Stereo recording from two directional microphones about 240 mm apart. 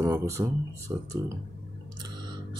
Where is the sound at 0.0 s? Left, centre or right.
Centre.